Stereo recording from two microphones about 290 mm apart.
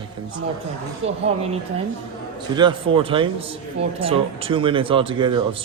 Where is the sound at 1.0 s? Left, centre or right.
Right.